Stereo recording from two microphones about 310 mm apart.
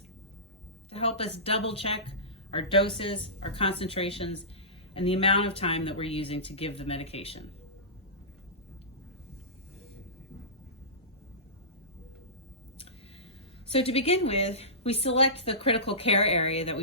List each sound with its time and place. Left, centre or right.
0.9 s speech: centre
13.7 s speech: centre